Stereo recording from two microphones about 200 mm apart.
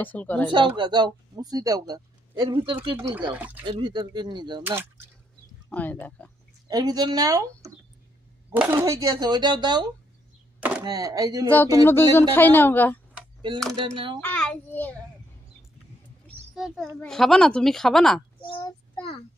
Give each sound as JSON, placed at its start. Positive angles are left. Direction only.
{"t": 0.0, "sound": "speech", "side_deg": 10}
{"t": 0.5, "sound": "speech", "side_deg": -25}
{"t": 3.3, "sound": "speech", "side_deg": -10}
{"t": 3.6, "sound": "speech", "side_deg": -25}
{"t": 5.7, "sound": "speech", "side_deg": 10}
{"t": 6.7, "sound": "speech", "side_deg": -20}
{"t": 8.7, "sound": "speech", "side_deg": -20}
{"t": 10.6, "sound": "a sound", "side_deg": -10}
{"t": 10.9, "sound": "speech", "side_deg": -20}
{"t": 11.8, "sound": "speech", "side_deg": 10}
{"t": 13.7, "sound": "speech", "side_deg": -25}
{"t": 14.2, "sound": "a child's voice", "side_deg": 5}
{"t": 16.5, "sound": "speech", "side_deg": 0}
{"t": 18.6, "sound": "child singing", "side_deg": 25}